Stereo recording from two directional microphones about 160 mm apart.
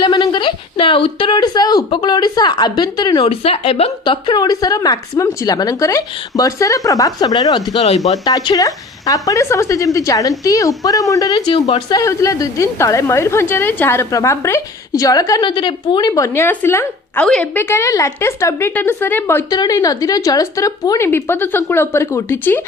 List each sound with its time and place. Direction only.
0.0 s speech: 30° left (ahead or behind)
3.2 s a woman's voice: 40° left (ahead or behind)
7.8 s speech: 45° left (ahead or behind)
8.2 s a woman's voice: 25° left (ahead or behind)